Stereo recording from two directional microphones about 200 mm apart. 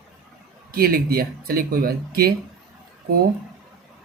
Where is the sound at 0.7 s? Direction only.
50° right (ahead or behind).